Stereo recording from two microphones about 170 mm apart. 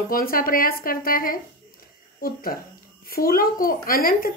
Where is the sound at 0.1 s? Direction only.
60° left (ahead or behind).